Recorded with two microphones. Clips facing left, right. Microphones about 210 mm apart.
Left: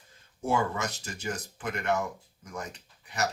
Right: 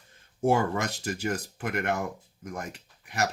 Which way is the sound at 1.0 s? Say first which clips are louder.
Right 5 dB; 60° right (ahead or behind).